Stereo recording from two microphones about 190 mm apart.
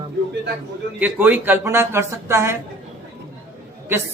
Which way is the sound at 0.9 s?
10° right (ahead or behind).